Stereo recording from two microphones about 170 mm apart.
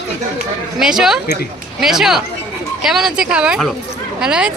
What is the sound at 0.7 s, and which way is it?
Speech, 5° right (ahead or behind).